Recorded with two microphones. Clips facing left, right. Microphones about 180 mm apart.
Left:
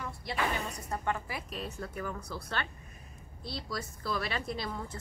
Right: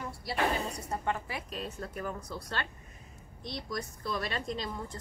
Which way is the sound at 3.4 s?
20° right (ahead or behind).